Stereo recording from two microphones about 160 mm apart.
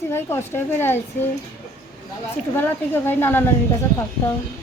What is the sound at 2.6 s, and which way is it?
Speech, 10° left (ahead or behind).